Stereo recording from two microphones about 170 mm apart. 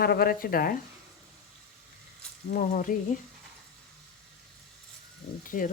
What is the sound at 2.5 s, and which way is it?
Speech, 50° left (ahead or behind).